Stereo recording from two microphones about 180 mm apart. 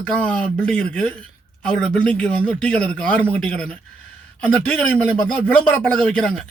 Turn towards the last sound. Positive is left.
turn(degrees=0)  # may be behind; listen again after turning